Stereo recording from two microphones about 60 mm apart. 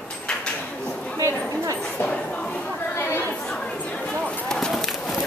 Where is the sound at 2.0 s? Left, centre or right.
Centre.